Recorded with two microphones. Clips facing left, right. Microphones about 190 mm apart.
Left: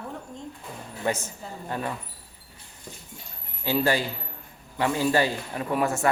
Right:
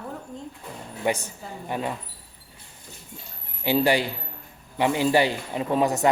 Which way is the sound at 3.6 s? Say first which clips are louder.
Right 3 dB; 15° right (ahead or behind).